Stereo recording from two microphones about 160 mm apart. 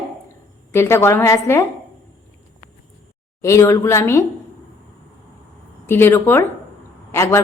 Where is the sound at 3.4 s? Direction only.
20° left (ahead or behind).